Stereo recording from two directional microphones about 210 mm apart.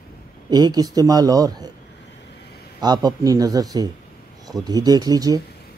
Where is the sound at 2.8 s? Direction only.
20° right (ahead or behind).